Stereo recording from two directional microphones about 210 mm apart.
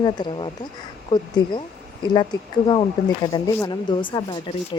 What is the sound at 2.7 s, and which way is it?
Speech, 20° left (ahead or behind).